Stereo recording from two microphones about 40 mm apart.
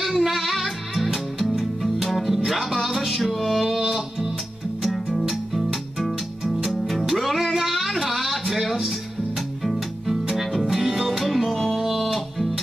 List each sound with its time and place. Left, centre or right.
0.0 s music: centre